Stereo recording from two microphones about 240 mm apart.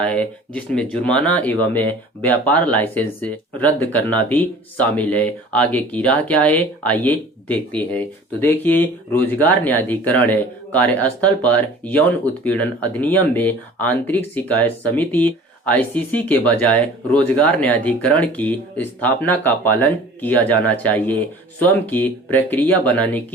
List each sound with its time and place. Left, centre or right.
0.0 s speech: centre